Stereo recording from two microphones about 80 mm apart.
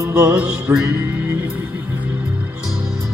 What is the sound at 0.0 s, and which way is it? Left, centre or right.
Music, right.